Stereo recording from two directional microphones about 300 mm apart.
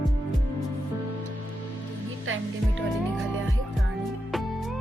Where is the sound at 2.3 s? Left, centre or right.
Right.